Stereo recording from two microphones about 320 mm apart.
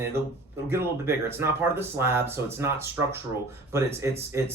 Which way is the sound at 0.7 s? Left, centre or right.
Centre.